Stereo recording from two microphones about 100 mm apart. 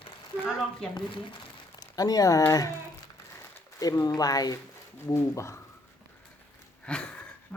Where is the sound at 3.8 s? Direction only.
35° left (ahead or behind).